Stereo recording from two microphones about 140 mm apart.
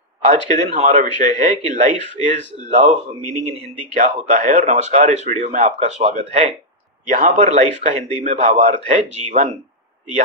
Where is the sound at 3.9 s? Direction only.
65° right (ahead or behind).